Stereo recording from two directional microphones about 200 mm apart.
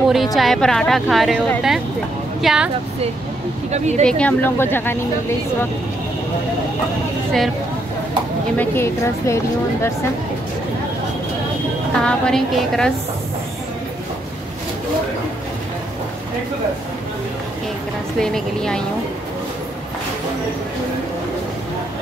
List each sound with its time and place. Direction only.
0.1 s a woman's voice: centre (ahead or behind)
3.7 s speech: 35° right (ahead or behind)
4.0 s speech: 5° left (ahead or behind)
8.5 s speech: 10° left (ahead or behind)
12.0 s a woman's voice: 5° left (ahead or behind)
18.2 s a woman's voice: 5° left (ahead or behind)